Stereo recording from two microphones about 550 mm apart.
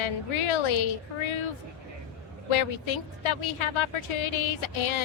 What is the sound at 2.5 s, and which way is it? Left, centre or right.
A woman's voice, left.